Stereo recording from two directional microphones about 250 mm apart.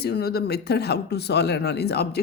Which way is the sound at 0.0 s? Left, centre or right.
Left.